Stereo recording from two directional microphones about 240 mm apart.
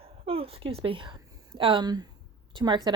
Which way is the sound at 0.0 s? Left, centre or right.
Right.